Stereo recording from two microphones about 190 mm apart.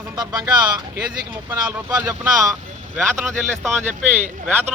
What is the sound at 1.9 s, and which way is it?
A man's voice, 15° right (ahead or behind).